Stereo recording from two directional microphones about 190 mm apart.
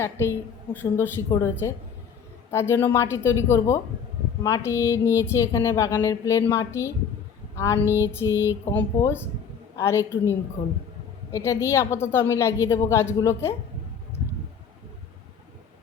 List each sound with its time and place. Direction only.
0.0 s a woman's voice: 10° left (ahead or behind)
7.9 s a sound: 10° right (ahead or behind)
8.6 s speech: 10° left (ahead or behind)
11.3 s speech: 15° left (ahead or behind)